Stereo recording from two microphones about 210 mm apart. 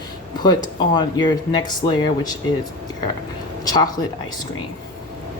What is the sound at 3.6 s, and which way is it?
Speech, 20° left (ahead or behind).